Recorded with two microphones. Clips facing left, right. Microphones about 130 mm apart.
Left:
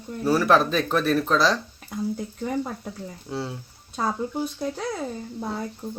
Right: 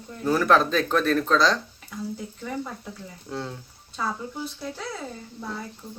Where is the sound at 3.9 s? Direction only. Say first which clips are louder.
Left 4 dB; 45° left (ahead or behind).